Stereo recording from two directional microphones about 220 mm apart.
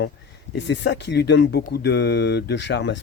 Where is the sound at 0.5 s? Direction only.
55° left (ahead or behind).